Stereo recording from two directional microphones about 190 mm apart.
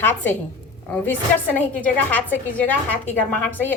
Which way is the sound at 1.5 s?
10° left (ahead or behind).